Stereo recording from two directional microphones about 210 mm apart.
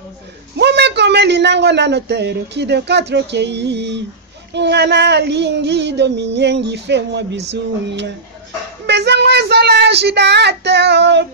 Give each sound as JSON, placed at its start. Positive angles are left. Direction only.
{"t": 0.6, "sound": "speech", "side_deg": -55}
{"t": 4.6, "sound": "child singing", "side_deg": -55}